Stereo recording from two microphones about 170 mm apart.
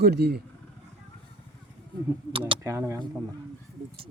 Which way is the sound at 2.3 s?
30° right (ahead or behind).